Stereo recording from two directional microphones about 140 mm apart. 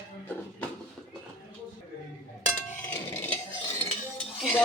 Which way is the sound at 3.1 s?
15° left (ahead or behind).